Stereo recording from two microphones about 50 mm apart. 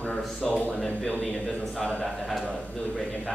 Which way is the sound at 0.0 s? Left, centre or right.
Centre.